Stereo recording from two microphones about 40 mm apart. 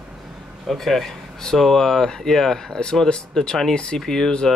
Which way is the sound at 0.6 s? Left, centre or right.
Centre.